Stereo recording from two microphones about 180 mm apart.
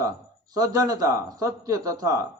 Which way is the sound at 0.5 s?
20° right (ahead or behind).